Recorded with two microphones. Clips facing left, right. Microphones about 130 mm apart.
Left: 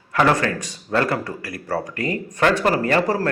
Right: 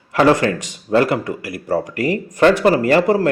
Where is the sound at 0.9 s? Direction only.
20° right (ahead or behind).